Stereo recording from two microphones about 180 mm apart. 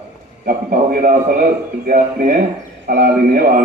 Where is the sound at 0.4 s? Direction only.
50° right (ahead or behind).